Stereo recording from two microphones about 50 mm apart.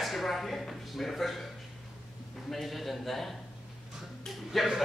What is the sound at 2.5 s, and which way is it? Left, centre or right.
Speech, centre.